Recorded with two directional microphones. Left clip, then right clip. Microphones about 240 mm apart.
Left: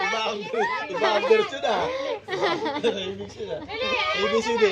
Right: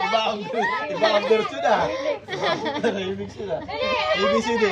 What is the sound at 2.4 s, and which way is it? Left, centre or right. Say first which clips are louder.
Speech: left 1 dB; left.